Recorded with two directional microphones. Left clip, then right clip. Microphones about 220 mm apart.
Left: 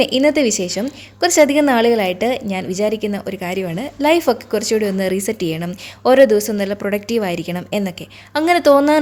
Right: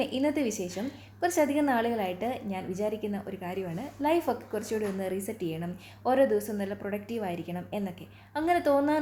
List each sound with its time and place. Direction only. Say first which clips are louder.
0.0 s a woman's voice: left 14 dB; 50° left (ahead or behind)